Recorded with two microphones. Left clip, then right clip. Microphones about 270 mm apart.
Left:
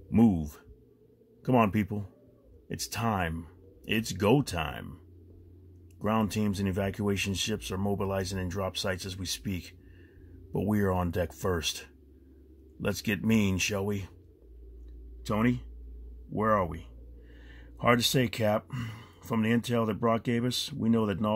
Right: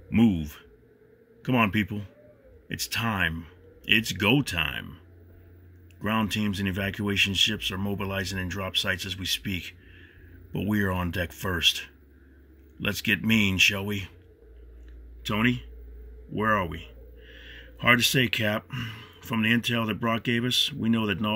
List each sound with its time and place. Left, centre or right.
0.1 s speech: centre
15.2 s speech: centre